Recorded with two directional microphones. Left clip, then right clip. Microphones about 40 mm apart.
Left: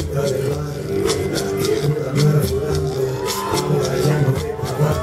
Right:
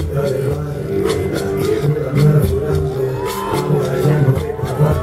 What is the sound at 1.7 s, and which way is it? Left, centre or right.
Music, left.